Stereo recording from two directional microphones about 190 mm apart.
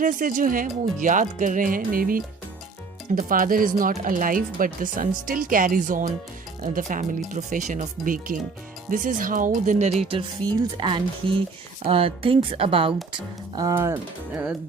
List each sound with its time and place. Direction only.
0.0 s speech: 45° right (ahead or behind)
10.4 s speech: 10° left (ahead or behind)
10.8 s speech: 25° right (ahead or behind)
13.1 s speech: 20° right (ahead or behind)